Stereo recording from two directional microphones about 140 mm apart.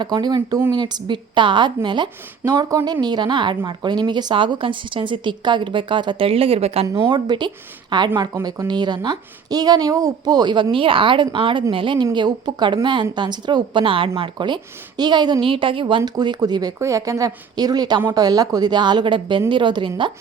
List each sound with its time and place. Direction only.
0.0 s a woman's voice: 30° right (ahead or behind)
7.1 s a woman's voice: 30° right (ahead or behind)